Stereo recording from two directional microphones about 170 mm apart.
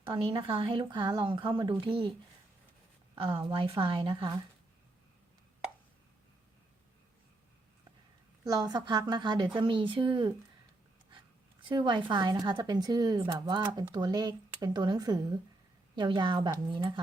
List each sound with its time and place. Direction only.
0.1 s speech: 30° right (ahead or behind)
3.4 s speech: 30° right (ahead or behind)
8.4 s speech: 20° right (ahead or behind)
11.6 s speech: 30° right (ahead or behind)